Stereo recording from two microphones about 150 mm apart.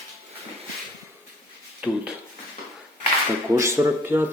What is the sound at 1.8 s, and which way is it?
Speech, 5° right (ahead or behind).